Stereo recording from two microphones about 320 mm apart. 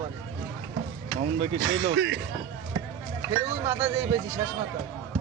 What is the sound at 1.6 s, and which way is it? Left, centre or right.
Speech, right.